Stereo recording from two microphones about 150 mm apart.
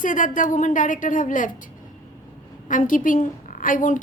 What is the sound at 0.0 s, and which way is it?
A woman's voice, 60° left (ahead or behind).